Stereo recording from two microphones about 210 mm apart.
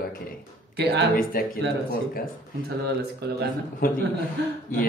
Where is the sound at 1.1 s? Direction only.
45° left (ahead or behind).